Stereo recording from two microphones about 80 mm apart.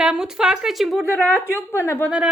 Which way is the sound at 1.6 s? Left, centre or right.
Left.